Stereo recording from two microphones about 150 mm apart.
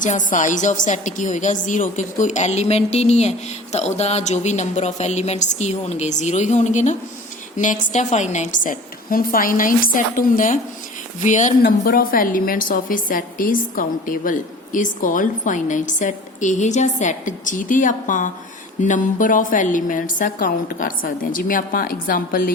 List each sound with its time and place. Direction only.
0.0 s a woman's voice: 60° left (ahead or behind)
11.6 s a woman's voice: 75° left (ahead or behind)